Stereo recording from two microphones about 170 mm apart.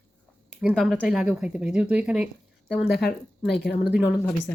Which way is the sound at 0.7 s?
Centre (ahead or behind).